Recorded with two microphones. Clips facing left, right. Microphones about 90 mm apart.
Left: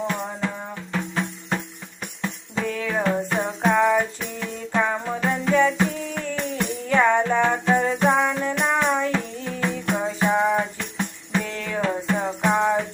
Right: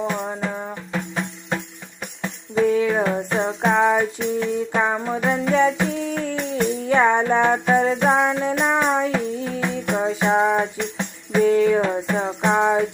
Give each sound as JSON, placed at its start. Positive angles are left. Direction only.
{"t": 0.1, "sound": "music", "side_deg": -15}
{"t": 0.9, "sound": "music", "side_deg": -5}
{"t": 3.7, "sound": "music", "side_deg": -20}